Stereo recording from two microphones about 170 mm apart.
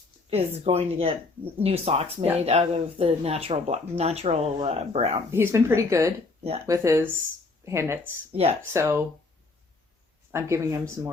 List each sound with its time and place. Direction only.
0.3 s speech: 35° right (ahead or behind)
5.3 s speech: 15° right (ahead or behind)
8.3 s speech: 35° right (ahead or behind)
8.7 s speech: 15° right (ahead or behind)
10.3 s speech: 15° right (ahead or behind)